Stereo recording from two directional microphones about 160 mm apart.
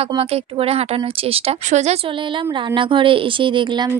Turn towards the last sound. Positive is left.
turn(degrees=-30)  # may be behind; listen again after turning